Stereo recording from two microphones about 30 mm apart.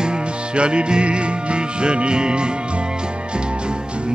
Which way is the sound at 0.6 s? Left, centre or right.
Right.